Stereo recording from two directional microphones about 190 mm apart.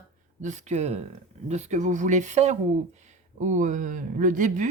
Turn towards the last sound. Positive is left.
turn(degrees=-40)  # may be behind; listen again after turning